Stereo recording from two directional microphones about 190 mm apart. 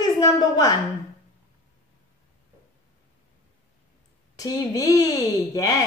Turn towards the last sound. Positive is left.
turn(degrees=20)  # may be behind; listen again after turning